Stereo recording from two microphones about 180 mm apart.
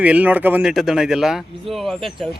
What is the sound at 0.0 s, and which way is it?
Speech, 10° right (ahead or behind).